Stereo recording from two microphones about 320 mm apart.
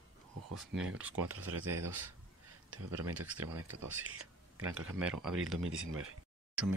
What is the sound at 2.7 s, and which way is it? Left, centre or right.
Speech, right.